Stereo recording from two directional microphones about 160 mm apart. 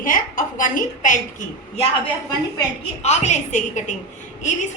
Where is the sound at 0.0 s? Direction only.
55° left (ahead or behind).